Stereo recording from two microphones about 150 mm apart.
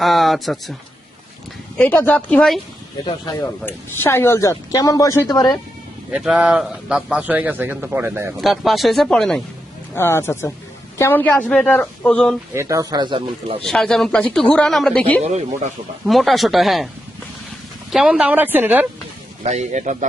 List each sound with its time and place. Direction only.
0.0 s speech: centre (ahead or behind)
1.8 s a woman's voice: 10° left (ahead or behind)
3.7 s speech: 15° left (ahead or behind)
6.1 s a man's voice: 5° right (ahead or behind)
8.4 s speech: centre (ahead or behind)
9.9 s a woman's voice: 15° left (ahead or behind)
12.5 s speech: 20° right (ahead or behind)
13.7 s speech: 5° left (ahead or behind)
15.2 s speech: 50° right (ahead or behind)
16.0 s speech: centre (ahead or behind)
17.9 s a man's voice: 5° right (ahead or behind)
19.4 s speech: 50° right (ahead or behind)